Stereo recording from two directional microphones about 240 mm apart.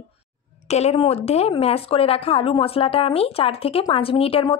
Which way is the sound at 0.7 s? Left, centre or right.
Left.